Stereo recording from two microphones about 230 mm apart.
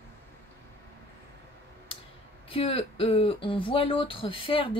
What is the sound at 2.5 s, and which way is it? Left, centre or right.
Speech, left.